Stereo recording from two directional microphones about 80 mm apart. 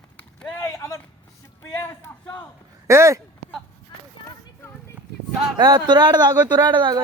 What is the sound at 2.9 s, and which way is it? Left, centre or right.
Speech, right.